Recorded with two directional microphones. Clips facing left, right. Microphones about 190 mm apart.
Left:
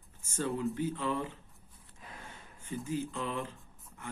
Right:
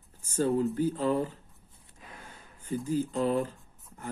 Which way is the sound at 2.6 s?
35° right (ahead or behind).